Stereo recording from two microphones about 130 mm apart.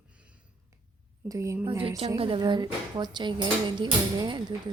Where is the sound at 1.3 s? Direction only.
25° right (ahead or behind).